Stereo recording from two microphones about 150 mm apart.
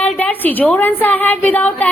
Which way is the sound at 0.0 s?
10° left (ahead or behind).